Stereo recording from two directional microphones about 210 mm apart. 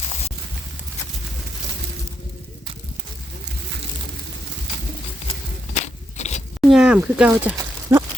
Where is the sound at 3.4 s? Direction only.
55° right (ahead or behind).